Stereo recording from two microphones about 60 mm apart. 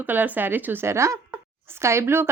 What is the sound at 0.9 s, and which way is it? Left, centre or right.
A woman's voice, right.